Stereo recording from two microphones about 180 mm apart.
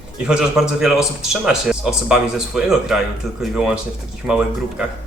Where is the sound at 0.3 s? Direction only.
5° right (ahead or behind).